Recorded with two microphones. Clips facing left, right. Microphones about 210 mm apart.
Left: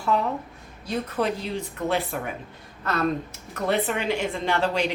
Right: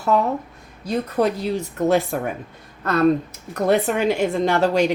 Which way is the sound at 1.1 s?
40° right (ahead or behind).